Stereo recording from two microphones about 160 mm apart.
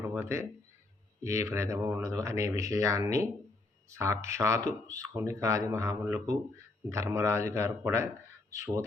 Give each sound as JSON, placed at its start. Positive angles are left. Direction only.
{"t": 0.1, "sound": "a man's voice", "side_deg": -15}